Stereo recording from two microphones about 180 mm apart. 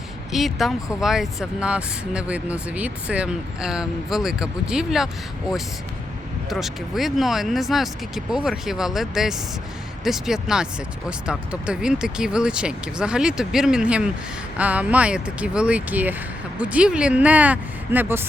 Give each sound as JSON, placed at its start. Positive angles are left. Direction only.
{"t": 0.3, "sound": "speech", "side_deg": 0}
{"t": 6.5, "sound": "speech", "side_deg": 0}